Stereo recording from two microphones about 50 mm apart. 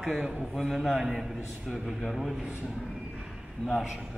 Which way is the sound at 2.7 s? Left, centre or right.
Centre.